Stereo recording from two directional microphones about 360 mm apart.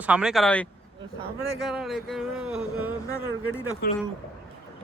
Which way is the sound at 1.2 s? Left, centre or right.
Left.